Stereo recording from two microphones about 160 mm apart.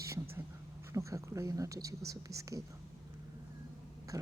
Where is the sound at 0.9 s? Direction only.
20° right (ahead or behind).